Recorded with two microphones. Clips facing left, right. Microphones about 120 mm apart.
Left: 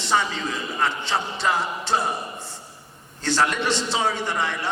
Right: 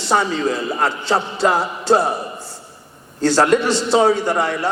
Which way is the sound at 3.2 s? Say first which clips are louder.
Right 8 dB; 40° right (ahead or behind).